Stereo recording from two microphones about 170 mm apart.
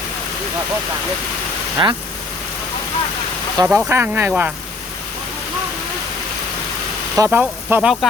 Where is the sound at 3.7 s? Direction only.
10° right (ahead or behind).